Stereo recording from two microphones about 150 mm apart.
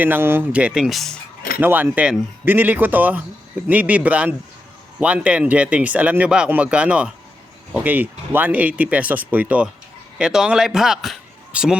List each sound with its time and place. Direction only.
0.0 s speech: 15° right (ahead or behind); by 1.2 s centre (ahead or behind)
1.5 s speech: 10° right (ahead or behind)